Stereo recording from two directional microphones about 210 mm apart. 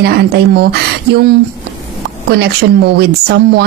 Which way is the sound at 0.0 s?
50° right (ahead or behind).